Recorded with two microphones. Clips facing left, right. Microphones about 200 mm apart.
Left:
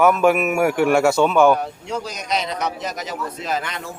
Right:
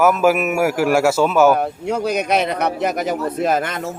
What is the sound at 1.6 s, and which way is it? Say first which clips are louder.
A man's voice: right 7 dB; 55° right (ahead or behind).